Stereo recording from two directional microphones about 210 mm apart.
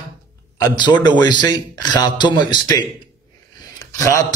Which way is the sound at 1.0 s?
20° left (ahead or behind).